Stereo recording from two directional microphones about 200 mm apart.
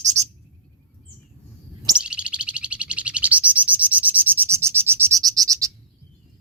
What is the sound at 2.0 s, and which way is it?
Bird, 5° right (ahead or behind).